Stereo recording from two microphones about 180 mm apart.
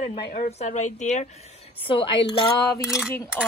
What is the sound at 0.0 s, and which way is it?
A woman's voice, 40° left (ahead or behind).